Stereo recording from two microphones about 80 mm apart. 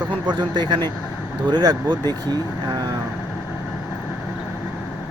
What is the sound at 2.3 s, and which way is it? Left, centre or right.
Speech, right.